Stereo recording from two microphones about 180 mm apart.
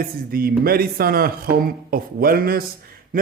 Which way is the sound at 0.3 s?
55° right (ahead or behind).